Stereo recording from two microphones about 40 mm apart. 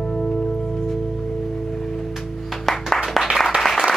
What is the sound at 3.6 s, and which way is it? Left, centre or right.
Applause, centre.